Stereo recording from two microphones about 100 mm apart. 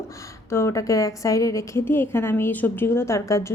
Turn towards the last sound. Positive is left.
turn(degrees=30)  # may be behind; listen again after turning